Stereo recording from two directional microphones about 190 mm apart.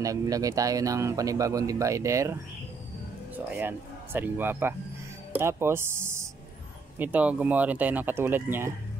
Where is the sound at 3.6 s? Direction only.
10° right (ahead or behind).